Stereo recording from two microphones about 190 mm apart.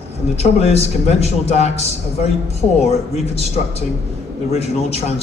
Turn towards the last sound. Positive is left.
turn(degrees=35)  # may be behind; listen again after turning